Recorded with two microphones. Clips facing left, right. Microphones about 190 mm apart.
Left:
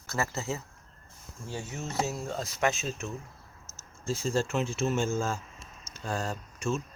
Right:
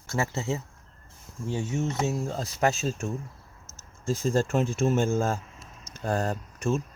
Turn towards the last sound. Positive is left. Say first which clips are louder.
# right 4 dB
turn(degrees=-55)  # may be behind; listen again after turning